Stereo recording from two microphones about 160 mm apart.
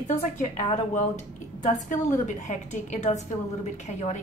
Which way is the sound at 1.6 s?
50° left (ahead or behind).